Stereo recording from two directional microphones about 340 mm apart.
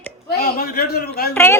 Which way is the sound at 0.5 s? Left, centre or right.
Left.